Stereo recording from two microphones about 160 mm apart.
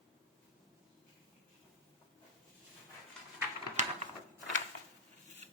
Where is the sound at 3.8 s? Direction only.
50° right (ahead or behind).